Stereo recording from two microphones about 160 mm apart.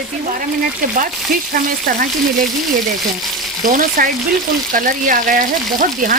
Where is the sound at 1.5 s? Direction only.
60° right (ahead or behind).